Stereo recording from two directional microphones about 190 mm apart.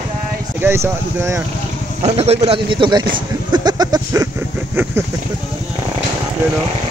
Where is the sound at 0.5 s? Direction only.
15° right (ahead or behind).